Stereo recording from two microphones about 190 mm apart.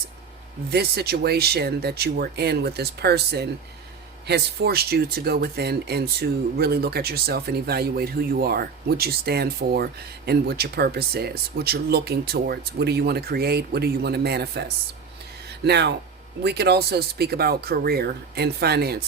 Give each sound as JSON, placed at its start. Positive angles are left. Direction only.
{"t": 0.7, "sound": "speech", "side_deg": -55}
{"t": 15.6, "sound": "speech", "side_deg": -60}